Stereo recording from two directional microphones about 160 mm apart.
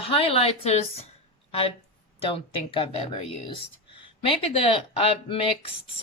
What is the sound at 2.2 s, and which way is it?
Speech, 35° left (ahead or behind).